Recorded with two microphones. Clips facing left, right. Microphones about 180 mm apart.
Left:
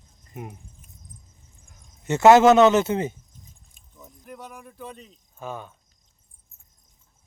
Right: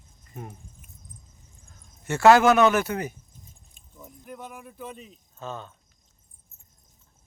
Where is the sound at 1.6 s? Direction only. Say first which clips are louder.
Left 4 dB; 15° left (ahead or behind).